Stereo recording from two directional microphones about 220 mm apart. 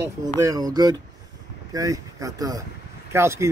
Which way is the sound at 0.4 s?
15° right (ahead or behind).